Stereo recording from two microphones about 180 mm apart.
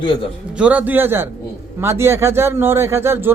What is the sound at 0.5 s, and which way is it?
A man's voice, 10° right (ahead or behind).